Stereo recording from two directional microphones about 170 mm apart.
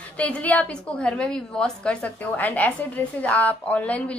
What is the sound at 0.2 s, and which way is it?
A woman's voice, 10° left (ahead or behind).